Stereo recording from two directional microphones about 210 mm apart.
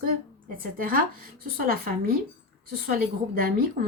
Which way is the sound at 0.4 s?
40° right (ahead or behind).